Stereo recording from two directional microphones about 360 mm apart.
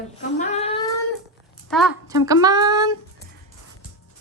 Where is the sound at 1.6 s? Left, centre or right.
Centre.